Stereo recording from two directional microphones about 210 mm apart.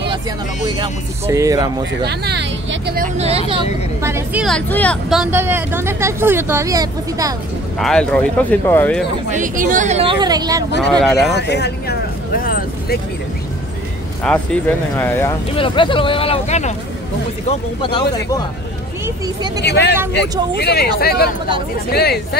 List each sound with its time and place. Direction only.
0.7 s speech: 20° right (ahead or behind)
2.0 s speech: 55° right (ahead or behind)
3.2 s speech: 30° right (ahead or behind)
4.0 s a woman's voice: 10° right (ahead or behind); by 5.2 s 5° left (ahead or behind)
5.2 s speech: 10° right (ahead or behind)
7.8 s a woman's voice: 5° left (ahead or behind)
9.3 s speech: 40° right (ahead or behind); by 10.6 s 20° right (ahead or behind)
10.9 s a woman's voice: 5° left (ahead or behind)
11.3 s vehicle: 55° left (ahead or behind)
14.2 s speech: 5° left (ahead or behind)
15.5 s speech: 25° left (ahead or behind)
17.5 s speech: 20° left (ahead or behind)
19.0 s speech: 20° right (ahead or behind)
19.6 s speech: 55° left (ahead or behind)